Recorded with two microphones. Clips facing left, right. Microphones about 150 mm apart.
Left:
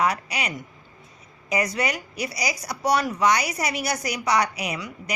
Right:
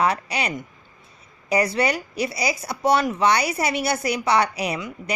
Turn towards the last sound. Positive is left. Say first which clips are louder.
# right 4 dB
turn(degrees=-30)  # may be behind; listen again after turning